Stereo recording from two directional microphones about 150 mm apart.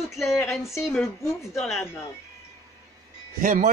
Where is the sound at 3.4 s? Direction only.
60° right (ahead or behind).